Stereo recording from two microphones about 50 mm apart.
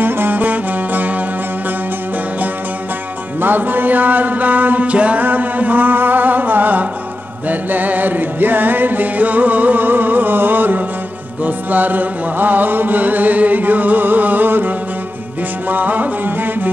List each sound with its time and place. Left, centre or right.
0.0 s music: right
3.3 s music: right
15.7 s music: right